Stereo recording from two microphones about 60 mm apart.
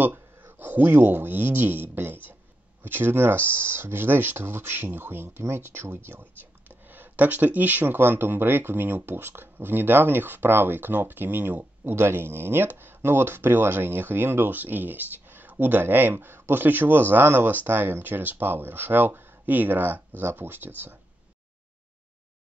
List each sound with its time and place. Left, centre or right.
0.0 s speech: right